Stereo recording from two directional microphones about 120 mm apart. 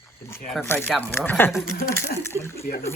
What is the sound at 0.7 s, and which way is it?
Speech, 20° left (ahead or behind).